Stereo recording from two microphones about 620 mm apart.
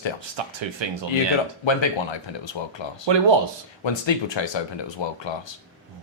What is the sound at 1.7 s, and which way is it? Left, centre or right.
A man's voice, left.